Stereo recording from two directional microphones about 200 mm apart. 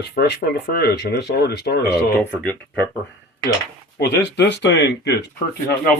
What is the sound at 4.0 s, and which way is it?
Speech, 55° left (ahead or behind).